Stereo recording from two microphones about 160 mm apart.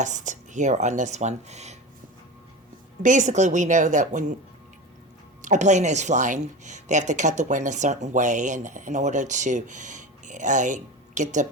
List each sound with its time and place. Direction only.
0.0 s speech: 50° right (ahead or behind)
3.0 s speech: 50° right (ahead or behind)
5.4 s speech: 50° right (ahead or behind)